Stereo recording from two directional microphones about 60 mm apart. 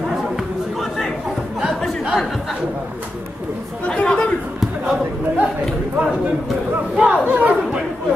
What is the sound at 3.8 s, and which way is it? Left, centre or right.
Chatter, centre.